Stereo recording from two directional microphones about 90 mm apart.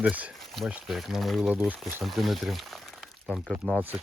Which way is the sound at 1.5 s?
20° right (ahead or behind).